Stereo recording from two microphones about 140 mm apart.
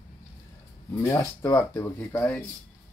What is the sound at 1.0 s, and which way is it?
Speech, 20° left (ahead or behind).